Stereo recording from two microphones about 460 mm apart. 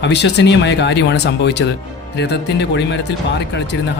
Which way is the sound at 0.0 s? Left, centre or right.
Left.